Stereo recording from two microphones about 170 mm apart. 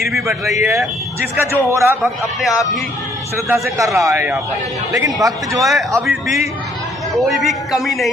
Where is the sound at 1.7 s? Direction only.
15° right (ahead or behind).